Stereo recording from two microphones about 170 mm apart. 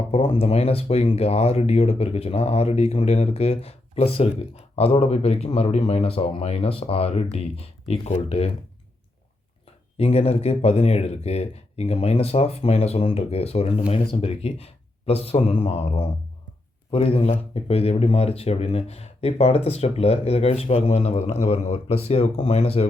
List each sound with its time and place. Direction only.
0.1 s speech: 35° left (ahead or behind)
10.0 s speech: 40° left (ahead or behind)